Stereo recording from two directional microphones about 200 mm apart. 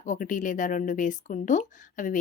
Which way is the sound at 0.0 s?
40° left (ahead or behind).